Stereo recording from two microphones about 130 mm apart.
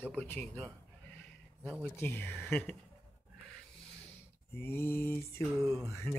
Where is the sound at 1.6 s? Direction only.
10° right (ahead or behind).